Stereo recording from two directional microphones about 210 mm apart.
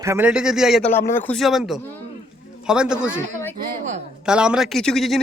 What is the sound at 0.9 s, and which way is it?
Speech, 10° left (ahead or behind).